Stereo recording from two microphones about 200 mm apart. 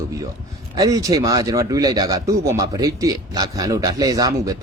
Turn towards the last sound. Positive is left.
turn(degrees=-20)  # may be behind; listen again after turning